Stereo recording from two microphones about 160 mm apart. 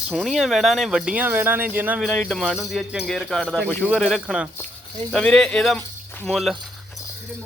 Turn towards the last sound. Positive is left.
turn(degrees=0)  # may be behind; listen again after turning